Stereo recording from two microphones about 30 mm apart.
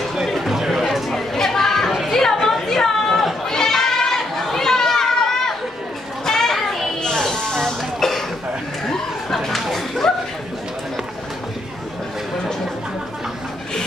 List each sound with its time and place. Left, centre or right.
0.4 s chatter: centre
1.1 s a sound: centre
1.9 s music: centre
2.1 s chatter: centre
3.4 s goat: centre
4.6 s children playing: centre
7.0 s a sound: centre